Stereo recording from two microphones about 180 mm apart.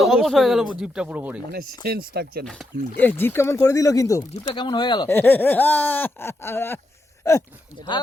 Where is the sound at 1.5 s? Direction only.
60° right (ahead or behind).